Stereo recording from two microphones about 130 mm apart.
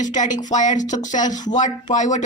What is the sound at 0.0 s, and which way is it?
Speech, 75° left (ahead or behind).